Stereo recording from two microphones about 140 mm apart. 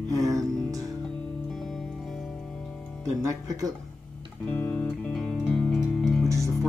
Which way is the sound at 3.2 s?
25° right (ahead or behind).